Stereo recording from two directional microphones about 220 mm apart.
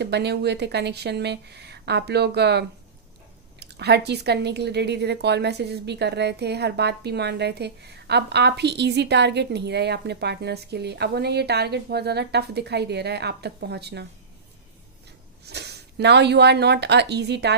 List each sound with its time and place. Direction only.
0.0 s a woman's voice: 50° right (ahead or behind)
15.4 s speech: 50° right (ahead or behind)